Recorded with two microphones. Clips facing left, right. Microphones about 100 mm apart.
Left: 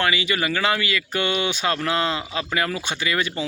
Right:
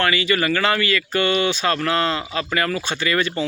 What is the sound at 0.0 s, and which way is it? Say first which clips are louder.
Speech: right 3 dB; 15° left (ahead or behind).